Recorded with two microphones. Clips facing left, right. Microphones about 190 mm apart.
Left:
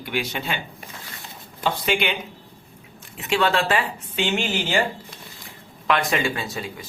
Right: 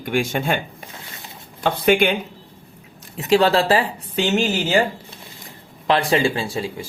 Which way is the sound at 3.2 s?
35° right (ahead or behind).